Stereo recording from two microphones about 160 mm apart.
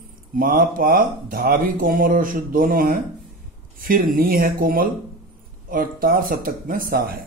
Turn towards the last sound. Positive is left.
turn(degrees=-65)  # may be behind; listen again after turning